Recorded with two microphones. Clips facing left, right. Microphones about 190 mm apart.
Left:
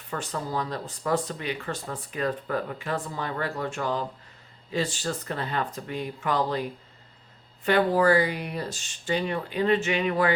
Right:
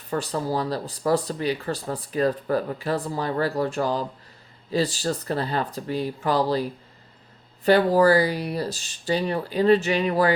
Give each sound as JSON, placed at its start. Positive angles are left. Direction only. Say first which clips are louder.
{"t": 0.1, "sound": "speech", "louder": "right 5 dB", "side_deg": -35}